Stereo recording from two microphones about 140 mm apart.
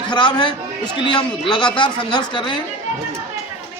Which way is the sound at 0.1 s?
35° left (ahead or behind).